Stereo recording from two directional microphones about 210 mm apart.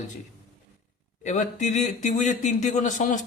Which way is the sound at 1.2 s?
35° left (ahead or behind).